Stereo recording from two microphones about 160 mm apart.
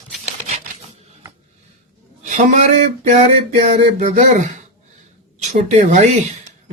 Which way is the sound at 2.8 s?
50° right (ahead or behind).